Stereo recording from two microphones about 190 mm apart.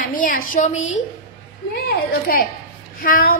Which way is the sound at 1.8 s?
55° left (ahead or behind).